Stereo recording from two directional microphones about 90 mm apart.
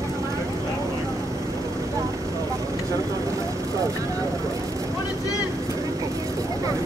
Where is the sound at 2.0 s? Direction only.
35° right (ahead or behind).